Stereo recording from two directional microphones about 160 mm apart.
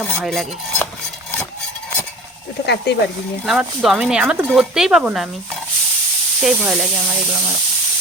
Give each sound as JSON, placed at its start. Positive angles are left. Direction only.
{"t": 0.0, "sound": "cutlery", "side_deg": 5}
{"t": 2.6, "sound": "speech", "side_deg": 90}
{"t": 3.4, "sound": "speech", "side_deg": -5}
{"t": 6.4, "sound": "speech", "side_deg": -5}